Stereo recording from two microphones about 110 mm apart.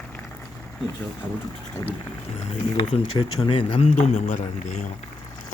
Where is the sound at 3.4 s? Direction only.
55° left (ahead or behind); by 4.8 s 85° left.